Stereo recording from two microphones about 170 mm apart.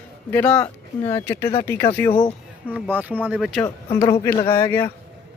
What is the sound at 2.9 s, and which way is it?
Speech, 10° right (ahead or behind).